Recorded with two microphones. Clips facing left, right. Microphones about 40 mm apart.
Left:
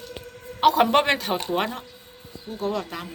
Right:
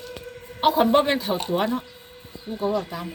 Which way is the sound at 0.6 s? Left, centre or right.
Left.